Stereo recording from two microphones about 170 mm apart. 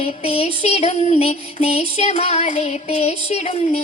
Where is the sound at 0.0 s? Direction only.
35° left (ahead or behind).